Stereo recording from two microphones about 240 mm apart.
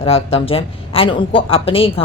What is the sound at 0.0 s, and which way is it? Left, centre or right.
A woman's voice, left.